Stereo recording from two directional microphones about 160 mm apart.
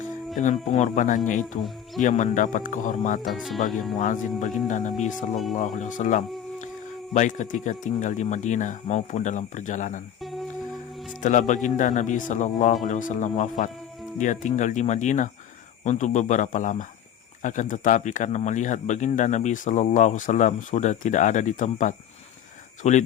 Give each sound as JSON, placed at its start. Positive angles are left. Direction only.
{"t": 0.3, "sound": "speech", "side_deg": 50}
{"t": 3.2, "sound": "speech", "side_deg": 0}
{"t": 3.9, "sound": "speech", "side_deg": 55}
{"t": 11.2, "sound": "speech", "side_deg": 50}